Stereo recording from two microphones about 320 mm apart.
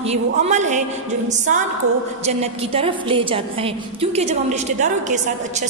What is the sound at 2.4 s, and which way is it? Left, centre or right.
A woman's voice, centre.